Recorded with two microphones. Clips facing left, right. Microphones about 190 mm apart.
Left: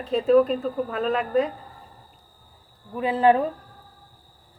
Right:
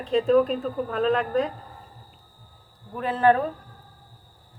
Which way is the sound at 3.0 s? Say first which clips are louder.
Left 1 dB; 15° left (ahead or behind).